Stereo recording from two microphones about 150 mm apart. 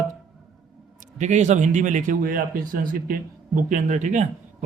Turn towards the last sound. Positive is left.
turn(degrees=-55)  # may be behind; listen again after turning